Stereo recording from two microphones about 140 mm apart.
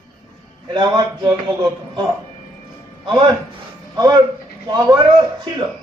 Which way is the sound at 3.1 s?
35° right (ahead or behind).